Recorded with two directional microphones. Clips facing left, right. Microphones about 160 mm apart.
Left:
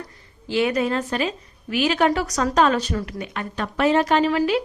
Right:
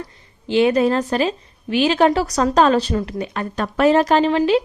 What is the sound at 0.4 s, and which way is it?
A woman's voice, 25° right (ahead or behind).